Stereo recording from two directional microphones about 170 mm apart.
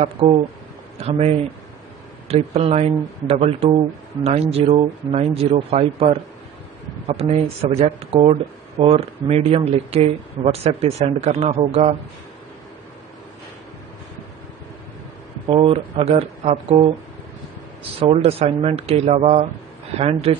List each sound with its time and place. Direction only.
0.0 s speech: 30° right (ahead or behind)
15.4 s speech: 35° right (ahead or behind)
17.9 s speech: 35° right (ahead or behind)